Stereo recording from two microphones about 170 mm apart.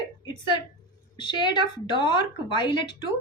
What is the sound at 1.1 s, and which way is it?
Speech, 25° left (ahead or behind).